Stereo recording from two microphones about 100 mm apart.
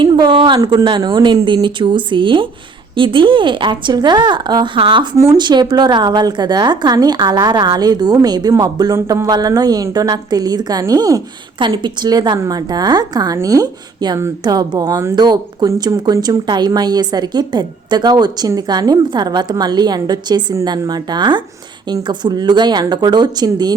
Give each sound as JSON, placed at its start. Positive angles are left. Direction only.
{"t": 0.0, "sound": "speech", "side_deg": -50}
{"t": 0.6, "sound": "a woman's voice", "side_deg": -35}
{"t": 0.9, "sound": "a woman's voice", "side_deg": -50}